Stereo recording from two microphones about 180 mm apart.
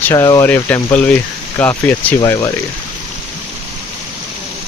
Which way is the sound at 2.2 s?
20° left (ahead or behind).